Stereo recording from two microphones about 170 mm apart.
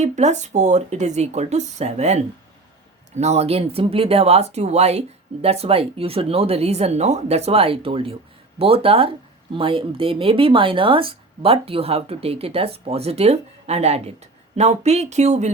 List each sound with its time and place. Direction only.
0.0 s speech: 40° right (ahead or behind)